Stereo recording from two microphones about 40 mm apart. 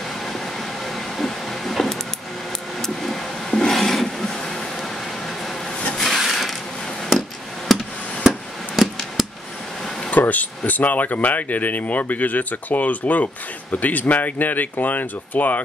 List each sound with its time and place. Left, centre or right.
1.1 s vehicle: centre
5.9 s wood: centre
7.2 s chop: centre
8.3 s a sound: centre
10.1 s speech: left